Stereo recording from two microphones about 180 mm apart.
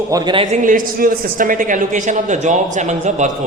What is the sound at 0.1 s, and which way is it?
Speech, 25° right (ahead or behind).